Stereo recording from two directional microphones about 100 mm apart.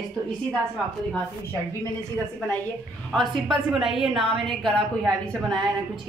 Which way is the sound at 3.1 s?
Centre (ahead or behind).